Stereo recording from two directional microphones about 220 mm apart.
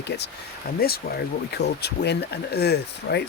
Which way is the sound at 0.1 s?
45° left (ahead or behind).